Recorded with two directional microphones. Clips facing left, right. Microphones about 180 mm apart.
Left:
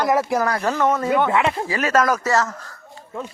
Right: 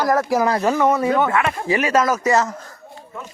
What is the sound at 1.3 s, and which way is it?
Speech, 20° left (ahead or behind).